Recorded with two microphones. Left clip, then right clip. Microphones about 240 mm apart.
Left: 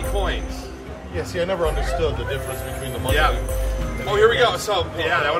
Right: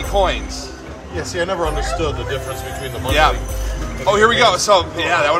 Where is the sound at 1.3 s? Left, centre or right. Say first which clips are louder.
Right 2 dB; right.